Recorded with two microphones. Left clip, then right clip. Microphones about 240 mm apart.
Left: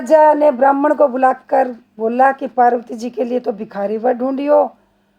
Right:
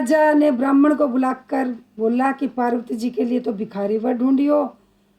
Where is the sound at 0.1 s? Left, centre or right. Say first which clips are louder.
Left 6 dB; left.